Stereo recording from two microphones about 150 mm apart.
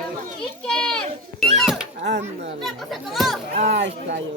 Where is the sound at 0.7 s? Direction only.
5° left (ahead or behind).